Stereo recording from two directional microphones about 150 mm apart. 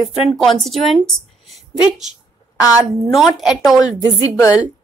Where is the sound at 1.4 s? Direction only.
Centre (ahead or behind).